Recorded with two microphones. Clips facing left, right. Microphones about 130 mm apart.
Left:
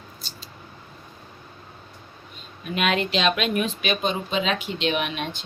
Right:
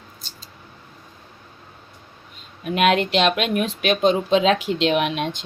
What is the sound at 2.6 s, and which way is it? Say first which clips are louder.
Speech: right 6 dB; 70° right (ahead or behind).